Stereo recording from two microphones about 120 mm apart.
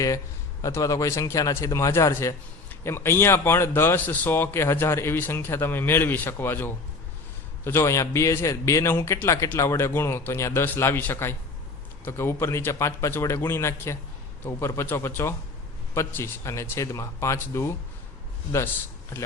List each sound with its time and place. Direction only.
0.6 s a man's voice: 25° left (ahead or behind)